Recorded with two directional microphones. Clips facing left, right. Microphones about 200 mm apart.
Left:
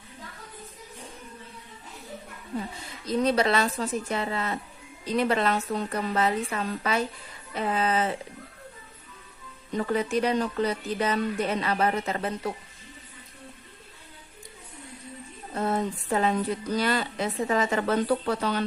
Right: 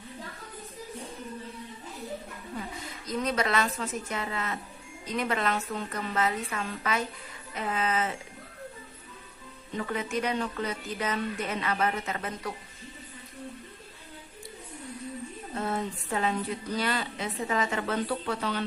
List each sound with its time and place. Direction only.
3.1 s speech: 30° left (ahead or behind)
9.7 s speech: 35° left (ahead or behind)
15.6 s a sound: 40° left (ahead or behind)
16.7 s speech: 40° left (ahead or behind)